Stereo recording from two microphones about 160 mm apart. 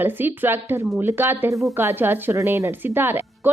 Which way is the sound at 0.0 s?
10° right (ahead or behind).